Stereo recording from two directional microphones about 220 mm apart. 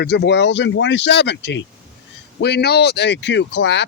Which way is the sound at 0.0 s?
50° left (ahead or behind).